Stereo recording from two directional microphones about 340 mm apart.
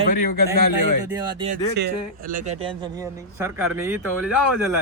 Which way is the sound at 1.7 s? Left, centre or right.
Right.